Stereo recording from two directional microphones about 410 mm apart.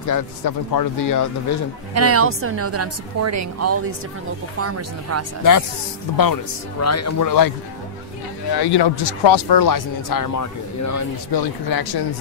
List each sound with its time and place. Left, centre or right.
0.1 s speech: left
2.0 s a woman's voice: right
5.4 s speech: left
6.8 s speech: left
8.5 s speech: left
11.3 s speech: left